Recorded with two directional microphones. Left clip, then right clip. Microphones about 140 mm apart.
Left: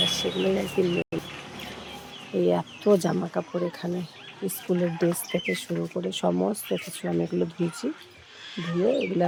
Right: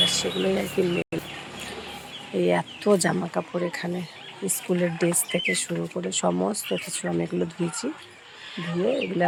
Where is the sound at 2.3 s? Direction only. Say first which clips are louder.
Right 1 dB; 15° left (ahead or behind).